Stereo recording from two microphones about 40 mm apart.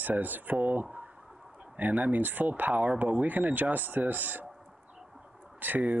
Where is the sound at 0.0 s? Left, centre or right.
Right.